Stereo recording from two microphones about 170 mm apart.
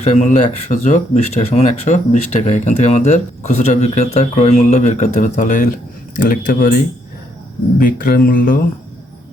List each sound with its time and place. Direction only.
0.0 s speech: 40° left (ahead or behind)